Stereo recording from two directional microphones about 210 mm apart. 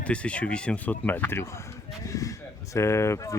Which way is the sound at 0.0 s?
5° left (ahead or behind).